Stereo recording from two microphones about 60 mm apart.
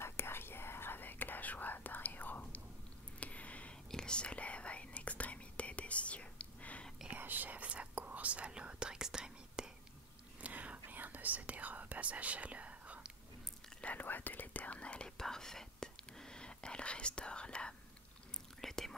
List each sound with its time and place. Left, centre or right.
0.0 s whispering: left
3.2 s a sound: left
3.9 s whispering: centre
7.2 s whispering: right; by 9.7 s centre
10.4 s whispering: right
13.7 s whispering: left
18.6 s whispering: centre